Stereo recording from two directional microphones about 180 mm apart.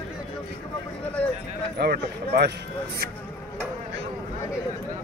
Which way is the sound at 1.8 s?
60° right (ahead or behind).